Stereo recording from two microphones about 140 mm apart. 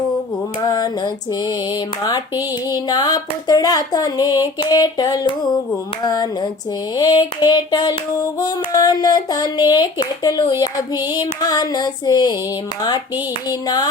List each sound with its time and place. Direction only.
0.7 s female singing: 30° left (ahead or behind)
2.7 s hands: 30° left (ahead or behind)
6.9 s hands: 25° left (ahead or behind)
13.5 s hands: 30° left (ahead or behind)